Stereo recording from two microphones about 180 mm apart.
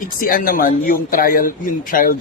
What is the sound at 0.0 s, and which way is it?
A man's voice, 50° left (ahead or behind).